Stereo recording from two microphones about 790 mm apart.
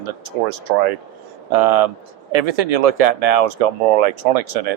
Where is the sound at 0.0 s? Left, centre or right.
Right.